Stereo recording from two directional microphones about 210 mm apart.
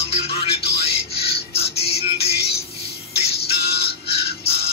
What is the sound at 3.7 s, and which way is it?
Music, 50° left (ahead or behind).